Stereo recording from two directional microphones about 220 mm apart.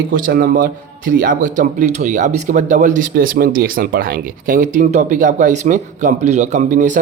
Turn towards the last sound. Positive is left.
turn(degrees=-35)  # may be behind; listen again after turning